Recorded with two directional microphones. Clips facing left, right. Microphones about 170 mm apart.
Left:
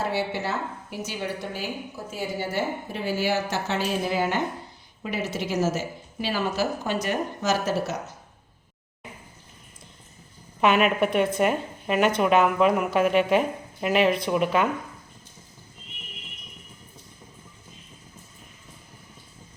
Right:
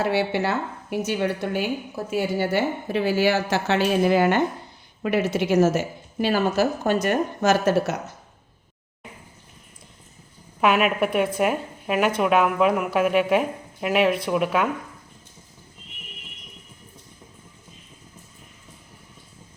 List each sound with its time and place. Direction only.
0.0 s a woman's voice: 70° right (ahead or behind)
10.6 s a woman's voice: 5° right (ahead or behind)